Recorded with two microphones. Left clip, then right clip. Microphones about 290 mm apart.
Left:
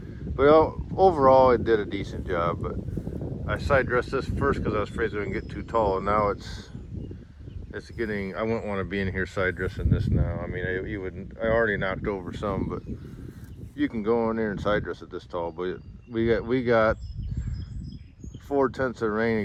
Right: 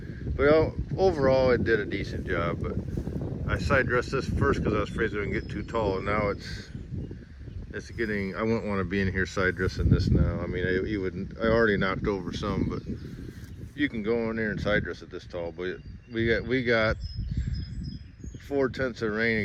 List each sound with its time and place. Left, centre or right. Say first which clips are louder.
0.4 s speech: left 4 dB; centre
7.7 s speech: even; centre
15.4 s speech: left 3 dB; left
15.7 s speech: left 2 dB; centre
18.5 s speech: left 3 dB; centre